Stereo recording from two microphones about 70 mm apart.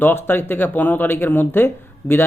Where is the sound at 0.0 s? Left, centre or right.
Left.